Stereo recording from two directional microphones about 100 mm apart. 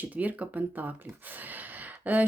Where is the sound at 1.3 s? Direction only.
15° right (ahead or behind).